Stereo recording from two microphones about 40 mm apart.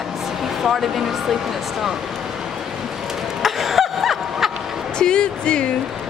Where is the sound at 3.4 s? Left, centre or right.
Centre.